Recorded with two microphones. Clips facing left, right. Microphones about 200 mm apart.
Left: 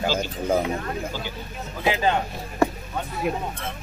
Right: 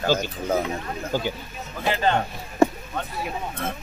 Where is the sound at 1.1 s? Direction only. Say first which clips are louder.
Right 7 dB; 50° right (ahead or behind).